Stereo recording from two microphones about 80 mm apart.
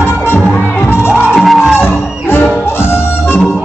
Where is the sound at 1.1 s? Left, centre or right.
Centre.